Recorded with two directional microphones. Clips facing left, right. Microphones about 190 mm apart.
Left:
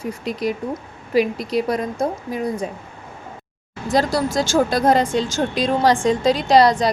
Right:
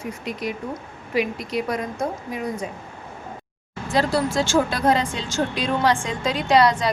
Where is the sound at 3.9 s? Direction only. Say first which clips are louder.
Left 2 dB; 40° left (ahead or behind).